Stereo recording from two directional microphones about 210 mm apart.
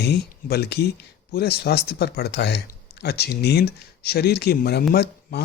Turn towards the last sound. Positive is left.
turn(degrees=50)  # may be behind; listen again after turning